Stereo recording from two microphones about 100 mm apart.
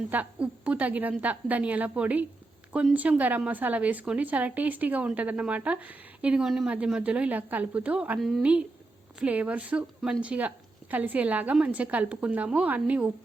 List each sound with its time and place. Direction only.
0.1 s speech: 15° right (ahead or behind)